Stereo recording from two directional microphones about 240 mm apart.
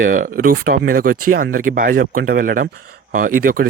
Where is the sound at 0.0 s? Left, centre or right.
Right.